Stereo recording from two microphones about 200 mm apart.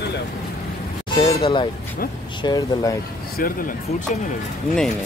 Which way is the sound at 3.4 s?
45° left (ahead or behind).